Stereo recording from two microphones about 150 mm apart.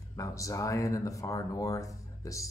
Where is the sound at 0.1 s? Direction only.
20° left (ahead or behind).